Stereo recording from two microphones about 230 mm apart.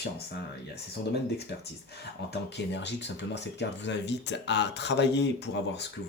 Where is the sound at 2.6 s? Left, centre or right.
Left.